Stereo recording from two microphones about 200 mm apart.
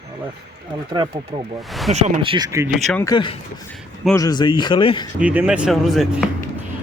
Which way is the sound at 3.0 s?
20° left (ahead or behind).